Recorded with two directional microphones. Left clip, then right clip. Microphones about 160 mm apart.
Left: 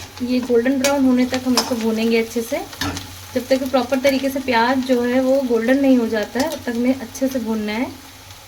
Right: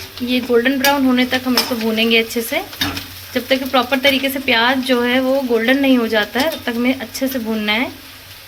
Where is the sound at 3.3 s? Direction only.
Centre (ahead or behind).